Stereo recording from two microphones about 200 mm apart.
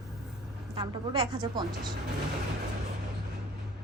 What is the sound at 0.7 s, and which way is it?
A woman's voice, 25° right (ahead or behind).